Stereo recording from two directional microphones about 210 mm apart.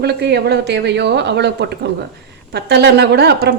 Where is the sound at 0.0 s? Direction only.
50° right (ahead or behind).